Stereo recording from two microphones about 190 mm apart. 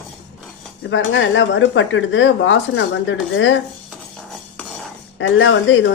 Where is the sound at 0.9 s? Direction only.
85° left.